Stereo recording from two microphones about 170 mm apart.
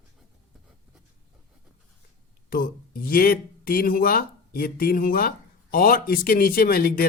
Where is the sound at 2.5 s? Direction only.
55° left (ahead or behind).